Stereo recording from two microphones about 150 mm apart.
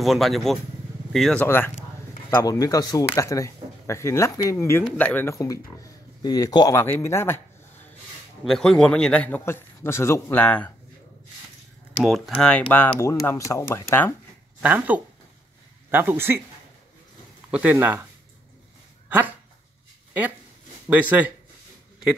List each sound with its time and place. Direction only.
0.0 s speech: centre (ahead or behind)
1.4 s a man's voice: 15° left (ahead or behind)
8.5 s a man's voice: centre (ahead or behind)
12.0 s a man's voice: centre (ahead or behind)
14.6 s speech: 10° right (ahead or behind)
17.5 s speech: 10° right (ahead or behind)
19.0 s speech: 10° right (ahead or behind)
20.9 s speech: 10° right (ahead or behind)